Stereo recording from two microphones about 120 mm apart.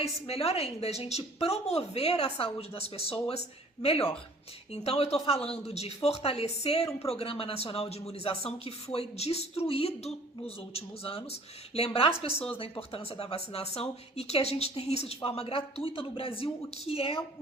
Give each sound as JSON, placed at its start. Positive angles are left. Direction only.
{"t": 0.0, "sound": "speech", "side_deg": 55}